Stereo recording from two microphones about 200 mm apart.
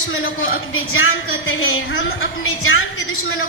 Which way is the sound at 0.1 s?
90° left.